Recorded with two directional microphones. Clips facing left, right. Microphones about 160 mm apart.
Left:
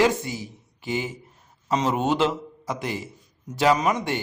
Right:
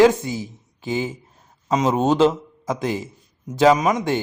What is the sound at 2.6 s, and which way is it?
A man's voice, 20° right (ahead or behind).